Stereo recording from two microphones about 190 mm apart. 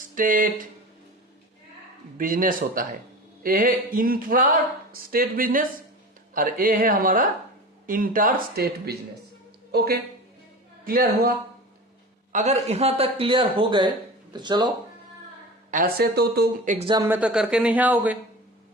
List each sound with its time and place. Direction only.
0.1 s speech: 45° right (ahead or behind)
2.1 s a woman's voice: 45° right (ahead or behind)
12.3 s a man's voice: 40° right (ahead or behind); by 14.7 s 25° right (ahead or behind)
15.7 s speech: 50° right (ahead or behind)
16.7 s speech: 25° right (ahead or behind)
17.0 s speech: 10° right (ahead or behind)